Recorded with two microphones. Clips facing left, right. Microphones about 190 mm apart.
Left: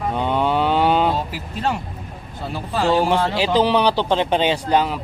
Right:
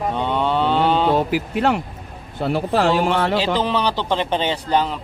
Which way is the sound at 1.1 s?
65° right (ahead or behind).